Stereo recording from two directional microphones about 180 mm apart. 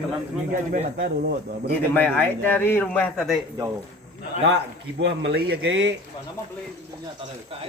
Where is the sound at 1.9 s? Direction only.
10° left (ahead or behind).